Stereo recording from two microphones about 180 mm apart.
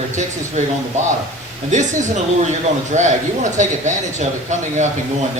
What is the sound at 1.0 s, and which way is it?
Speech, 40° right (ahead or behind).